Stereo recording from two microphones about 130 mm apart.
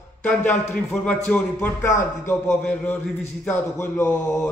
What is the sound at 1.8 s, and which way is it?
Speech, 20° left (ahead or behind).